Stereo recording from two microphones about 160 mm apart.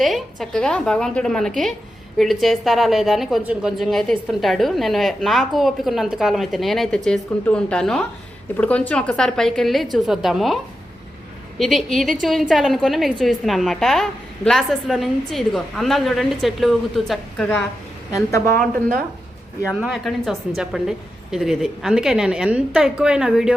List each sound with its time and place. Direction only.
0.0 s a woman's voice: centre (ahead or behind)
18.1 s a woman's voice: 20° left (ahead or behind)
19.8 s a woman's voice: centre (ahead or behind)